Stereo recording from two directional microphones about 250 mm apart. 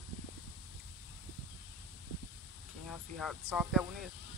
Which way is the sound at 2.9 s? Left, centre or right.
Centre.